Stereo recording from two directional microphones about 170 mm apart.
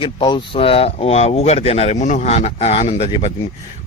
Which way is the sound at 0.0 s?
30° left (ahead or behind).